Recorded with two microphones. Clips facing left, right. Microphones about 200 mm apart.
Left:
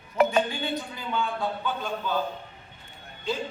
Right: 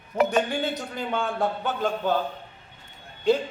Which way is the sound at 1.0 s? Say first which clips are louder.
Right 7 dB; 50° right (ahead or behind).